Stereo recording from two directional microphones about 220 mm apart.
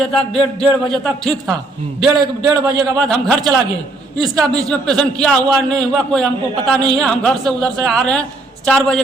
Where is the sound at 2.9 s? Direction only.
Centre (ahead or behind).